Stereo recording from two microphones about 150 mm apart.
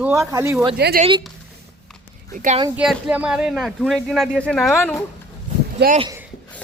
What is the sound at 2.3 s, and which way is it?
Speech, 55° right (ahead or behind).